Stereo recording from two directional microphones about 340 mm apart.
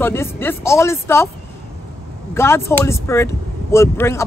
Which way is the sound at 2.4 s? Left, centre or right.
Centre.